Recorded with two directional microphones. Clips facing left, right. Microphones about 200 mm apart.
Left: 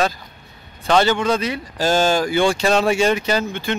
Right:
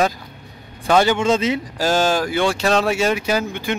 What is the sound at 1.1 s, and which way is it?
Speech, 25° right (ahead or behind).